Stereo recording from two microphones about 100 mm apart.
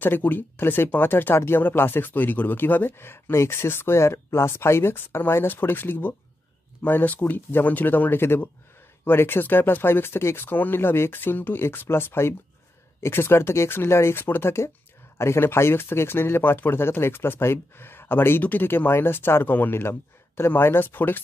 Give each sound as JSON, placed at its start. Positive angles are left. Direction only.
{"t": 0.0, "sound": "speech", "side_deg": 20}